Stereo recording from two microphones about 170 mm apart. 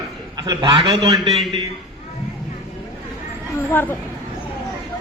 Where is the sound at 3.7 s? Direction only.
10° left (ahead or behind).